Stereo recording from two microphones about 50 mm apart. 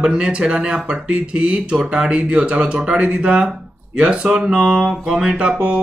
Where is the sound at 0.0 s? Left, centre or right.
Centre.